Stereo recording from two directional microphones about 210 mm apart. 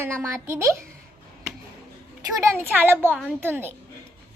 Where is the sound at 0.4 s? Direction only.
10° right (ahead or behind).